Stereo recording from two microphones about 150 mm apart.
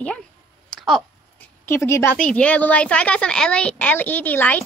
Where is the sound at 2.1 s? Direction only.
5° left (ahead or behind).